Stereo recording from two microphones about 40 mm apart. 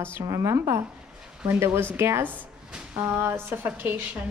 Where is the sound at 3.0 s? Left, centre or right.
Right.